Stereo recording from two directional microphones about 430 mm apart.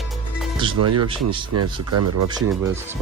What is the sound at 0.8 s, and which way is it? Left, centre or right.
Speech, right.